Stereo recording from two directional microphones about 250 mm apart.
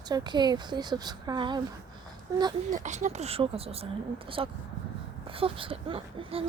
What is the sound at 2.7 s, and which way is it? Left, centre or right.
Speech, right.